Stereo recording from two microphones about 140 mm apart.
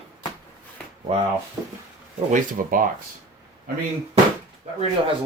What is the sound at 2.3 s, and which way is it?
Speech, 75° right (ahead or behind).